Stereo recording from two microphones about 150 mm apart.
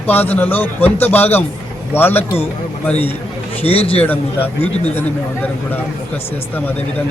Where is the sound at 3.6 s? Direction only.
40° left (ahead or behind).